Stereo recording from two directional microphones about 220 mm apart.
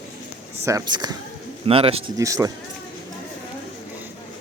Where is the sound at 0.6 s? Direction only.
15° right (ahead or behind).